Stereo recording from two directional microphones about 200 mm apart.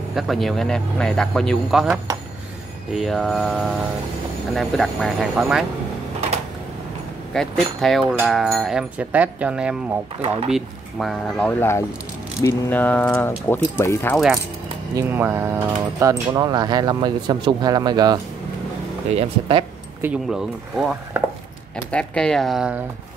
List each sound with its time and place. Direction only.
0.1 s speech: centre (ahead or behind)
7.3 s speech: centre (ahead or behind)
10.2 s speech: 30° right (ahead or behind)
10.5 s speech: centre (ahead or behind)
14.1 s speech: centre (ahead or behind); by 19.6 s 25° right (ahead or behind)
20.0 s speech: 5° right (ahead or behind)